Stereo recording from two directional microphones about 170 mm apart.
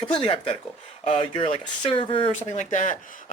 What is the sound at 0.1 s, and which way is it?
Speech, 30° left (ahead or behind).